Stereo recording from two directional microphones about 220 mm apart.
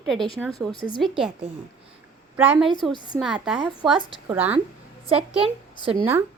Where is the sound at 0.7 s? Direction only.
25° left (ahead or behind).